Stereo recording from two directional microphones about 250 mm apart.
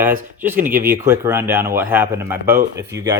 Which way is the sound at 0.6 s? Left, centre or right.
Right.